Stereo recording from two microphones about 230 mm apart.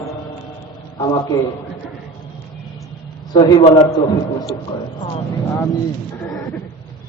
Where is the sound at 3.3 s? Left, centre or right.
Centre.